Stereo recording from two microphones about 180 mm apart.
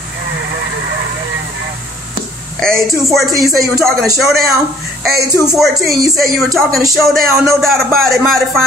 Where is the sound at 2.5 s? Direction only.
Centre (ahead or behind).